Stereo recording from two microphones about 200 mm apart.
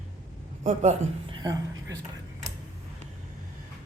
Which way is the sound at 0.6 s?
35° right (ahead or behind).